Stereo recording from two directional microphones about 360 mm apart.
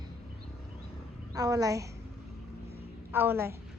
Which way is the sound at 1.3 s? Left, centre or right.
Centre.